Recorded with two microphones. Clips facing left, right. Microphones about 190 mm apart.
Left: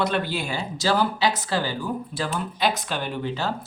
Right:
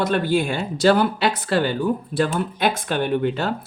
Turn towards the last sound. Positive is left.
turn(degrees=-60)  # may be behind; listen again after turning